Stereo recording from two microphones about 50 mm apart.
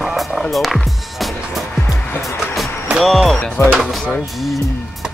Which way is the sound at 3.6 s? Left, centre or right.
Left.